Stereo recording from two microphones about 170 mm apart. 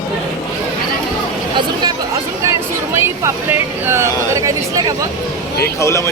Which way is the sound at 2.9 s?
15° right (ahead or behind).